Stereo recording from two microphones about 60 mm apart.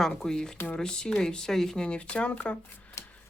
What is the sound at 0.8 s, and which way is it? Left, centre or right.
Speech, centre.